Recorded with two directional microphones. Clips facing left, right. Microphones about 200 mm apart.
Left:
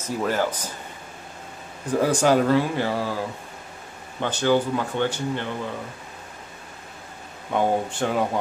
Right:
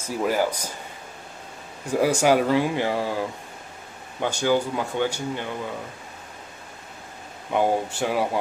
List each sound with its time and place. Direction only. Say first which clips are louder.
0.0 s speech: right 1 dB; 10° right (ahead or behind)
1.9 s speech: even; 10° right (ahead or behind)
4.2 s speech: left 1 dB; 10° right (ahead or behind)
7.5 s speech: even; 10° right (ahead or behind)